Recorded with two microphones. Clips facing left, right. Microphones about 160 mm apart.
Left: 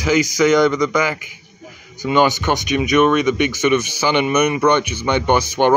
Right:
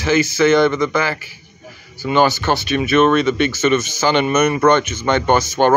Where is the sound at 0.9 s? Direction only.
15° left (ahead or behind).